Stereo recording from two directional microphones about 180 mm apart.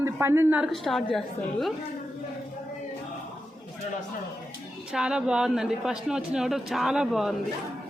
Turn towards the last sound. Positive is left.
turn(degrees=0)  # may be behind; listen again after turning